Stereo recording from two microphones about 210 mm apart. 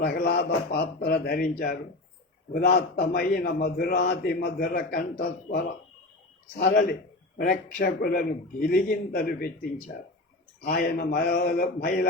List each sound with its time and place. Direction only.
0.0 s a man's voice: 45° left (ahead or behind)
10.7 s a man's voice: 45° left (ahead or behind)